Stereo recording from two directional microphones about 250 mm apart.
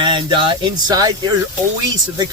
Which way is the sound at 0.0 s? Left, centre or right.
Centre.